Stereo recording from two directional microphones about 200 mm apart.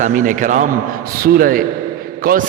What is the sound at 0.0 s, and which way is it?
A man's voice, 40° right (ahead or behind).